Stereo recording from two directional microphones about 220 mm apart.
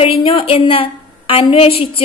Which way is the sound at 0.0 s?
25° left (ahead or behind).